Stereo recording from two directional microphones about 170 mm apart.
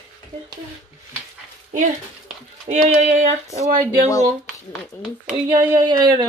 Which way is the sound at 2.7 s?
40° right (ahead or behind).